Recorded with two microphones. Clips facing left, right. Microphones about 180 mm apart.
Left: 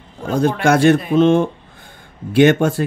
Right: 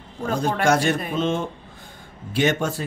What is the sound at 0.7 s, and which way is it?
Speech, 60° left (ahead or behind).